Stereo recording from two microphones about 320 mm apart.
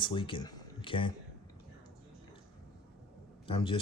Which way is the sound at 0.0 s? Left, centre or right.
Centre.